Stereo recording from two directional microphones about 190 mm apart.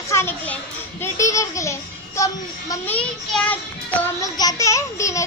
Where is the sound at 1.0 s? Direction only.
15° left (ahead or behind).